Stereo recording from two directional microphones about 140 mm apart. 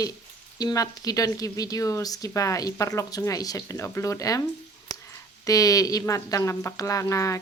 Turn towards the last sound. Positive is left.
turn(degrees=20)  # may be behind; listen again after turning